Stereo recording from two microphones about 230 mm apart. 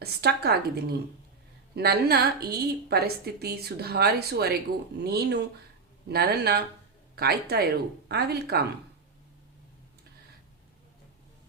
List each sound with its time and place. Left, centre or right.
0.0 s a woman's voice: right